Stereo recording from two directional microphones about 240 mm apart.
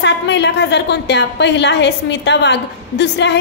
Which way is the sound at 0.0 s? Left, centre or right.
Left.